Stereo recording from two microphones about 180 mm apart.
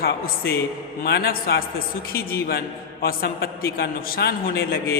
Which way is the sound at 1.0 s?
60° left (ahead or behind).